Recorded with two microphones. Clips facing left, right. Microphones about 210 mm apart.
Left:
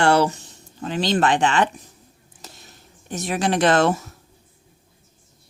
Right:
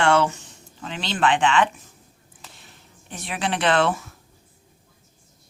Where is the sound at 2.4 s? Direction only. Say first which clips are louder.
Left 4 dB; 40° left (ahead or behind).